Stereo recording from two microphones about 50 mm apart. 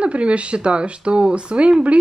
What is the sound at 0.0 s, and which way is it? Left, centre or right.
Speech, right.